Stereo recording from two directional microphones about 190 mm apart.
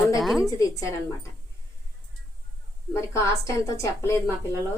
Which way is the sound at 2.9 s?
15° left (ahead or behind).